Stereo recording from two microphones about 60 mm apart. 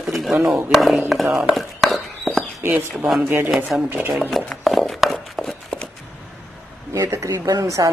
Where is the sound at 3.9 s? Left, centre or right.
Right.